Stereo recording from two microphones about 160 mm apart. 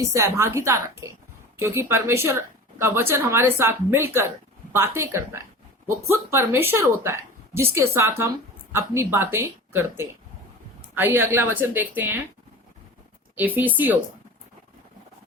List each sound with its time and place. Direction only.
0.0 s a woman's voice: 15° right (ahead or behind)
13.3 s a woman's voice: 10° right (ahead or behind)